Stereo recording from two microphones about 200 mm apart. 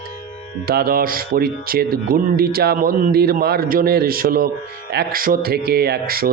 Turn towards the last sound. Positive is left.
turn(degrees=-50)  # may be behind; listen again after turning